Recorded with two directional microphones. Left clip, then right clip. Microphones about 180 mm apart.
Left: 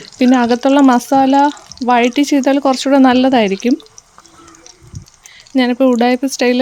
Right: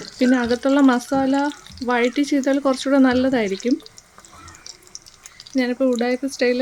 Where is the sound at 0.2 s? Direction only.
40° left (ahead or behind).